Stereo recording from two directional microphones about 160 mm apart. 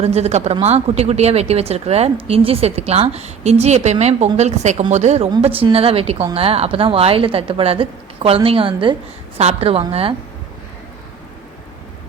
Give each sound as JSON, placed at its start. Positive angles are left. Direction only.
{"t": 0.0, "sound": "speech", "side_deg": -40}